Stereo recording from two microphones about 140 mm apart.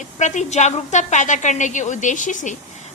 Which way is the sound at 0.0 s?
60° left (ahead or behind).